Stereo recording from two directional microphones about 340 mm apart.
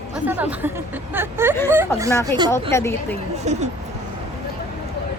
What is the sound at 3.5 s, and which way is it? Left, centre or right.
Speech, centre.